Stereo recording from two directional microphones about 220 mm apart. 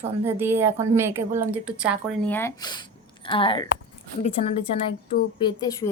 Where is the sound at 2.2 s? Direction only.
10° left (ahead or behind).